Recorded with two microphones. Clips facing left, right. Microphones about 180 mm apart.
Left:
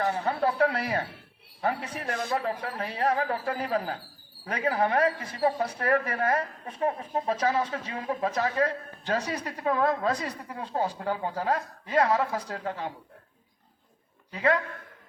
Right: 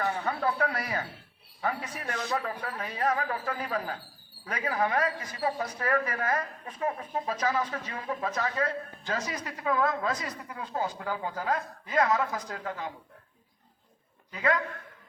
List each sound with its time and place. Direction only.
0.0 s a woman's voice: 35° left (ahead or behind)
2.1 s speech: 50° left (ahead or behind)
2.6 s a woman's voice: 35° left (ahead or behind)
14.3 s a woman's voice: 35° left (ahead or behind)